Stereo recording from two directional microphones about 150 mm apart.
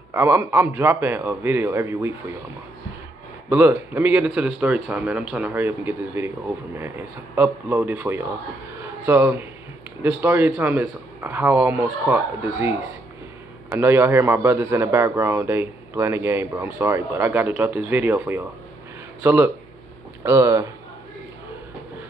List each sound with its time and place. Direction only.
0.1 s a man's voice: 15° right (ahead or behind)
3.4 s a man's voice: 10° right (ahead or behind)
13.7 s a man's voice: 15° right (ahead or behind)